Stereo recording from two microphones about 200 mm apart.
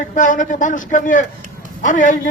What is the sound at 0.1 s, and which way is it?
A man's voice, 40° left (ahead or behind).